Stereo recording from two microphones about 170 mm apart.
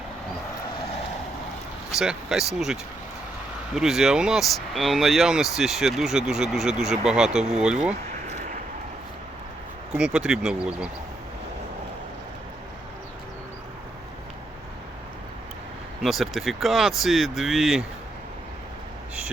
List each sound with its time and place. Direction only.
1.9 s speech: 5° right (ahead or behind)
3.8 s speech: centre (ahead or behind)
9.9 s speech: 5° right (ahead or behind)
16.0 s speech: centre (ahead or behind)